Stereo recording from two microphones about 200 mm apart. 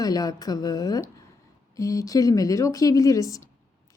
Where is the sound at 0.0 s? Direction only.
20° left (ahead or behind).